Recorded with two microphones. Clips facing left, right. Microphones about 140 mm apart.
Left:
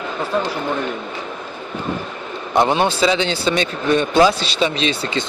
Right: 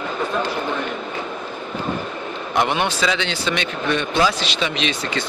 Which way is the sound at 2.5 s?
30° left (ahead or behind).